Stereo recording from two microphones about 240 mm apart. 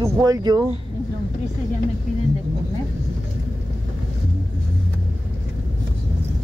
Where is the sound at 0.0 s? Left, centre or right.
Centre.